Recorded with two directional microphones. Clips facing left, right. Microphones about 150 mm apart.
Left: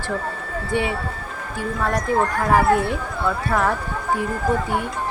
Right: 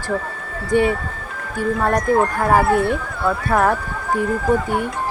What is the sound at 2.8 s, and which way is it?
Speech, 50° right (ahead or behind).